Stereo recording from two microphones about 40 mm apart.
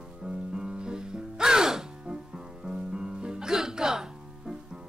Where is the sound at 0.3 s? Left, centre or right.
Right.